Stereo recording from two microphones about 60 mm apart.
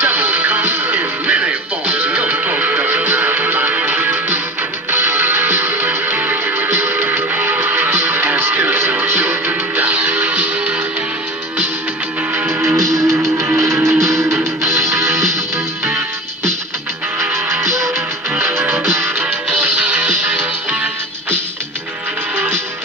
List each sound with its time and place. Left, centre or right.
0.0 s music: right
12.7 s music: right
17.2 s music: right
20.1 s music: centre